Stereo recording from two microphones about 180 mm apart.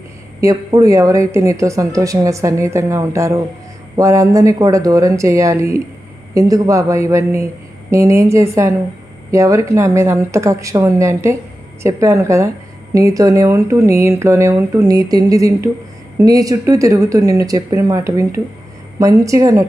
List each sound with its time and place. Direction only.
0.4 s a woman's voice: 20° right (ahead or behind)